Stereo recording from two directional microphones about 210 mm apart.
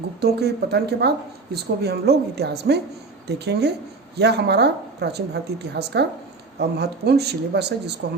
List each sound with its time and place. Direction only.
0.2 s a woman's voice: 50° right (ahead or behind)